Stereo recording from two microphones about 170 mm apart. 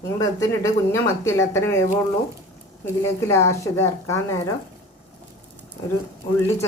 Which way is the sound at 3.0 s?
15° left (ahead or behind).